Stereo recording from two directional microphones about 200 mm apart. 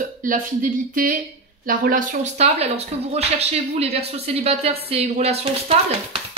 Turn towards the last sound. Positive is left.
turn(degrees=-30)  # may be behind; listen again after turning